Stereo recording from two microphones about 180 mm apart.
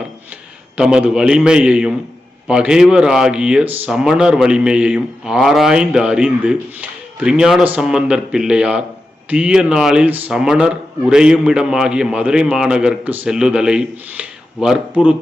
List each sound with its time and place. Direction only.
0.8 s speech: 5° right (ahead or behind)